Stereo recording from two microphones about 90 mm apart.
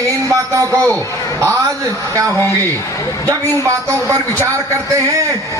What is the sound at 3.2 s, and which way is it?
Speech, 35° right (ahead or behind).